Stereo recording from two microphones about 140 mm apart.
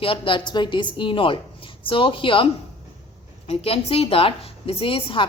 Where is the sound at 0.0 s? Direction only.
35° left (ahead or behind).